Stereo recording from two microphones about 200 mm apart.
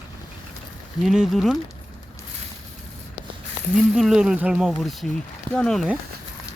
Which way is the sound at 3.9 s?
5° right (ahead or behind).